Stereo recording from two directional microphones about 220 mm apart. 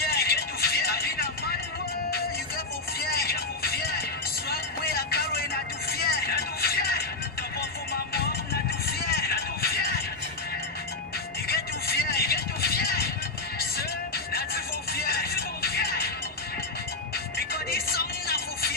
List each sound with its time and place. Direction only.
0.0 s music: 45° left (ahead or behind)
3.0 s music: 45° left (ahead or behind)
4.5 s vehicle: 45° left (ahead or behind)
7.5 s music: 45° left (ahead or behind)
11.4 s music: 45° left (ahead or behind)
17.1 s music: 45° left (ahead or behind)